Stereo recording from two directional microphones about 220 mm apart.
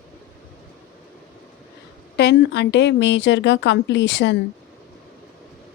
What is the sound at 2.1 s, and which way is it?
A woman's voice, 50° left (ahead or behind).